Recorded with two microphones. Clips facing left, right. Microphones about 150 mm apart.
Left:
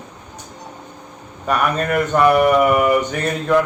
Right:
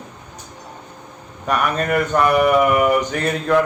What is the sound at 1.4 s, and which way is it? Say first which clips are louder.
Mantra: left 1 dB; centre (ahead or behind).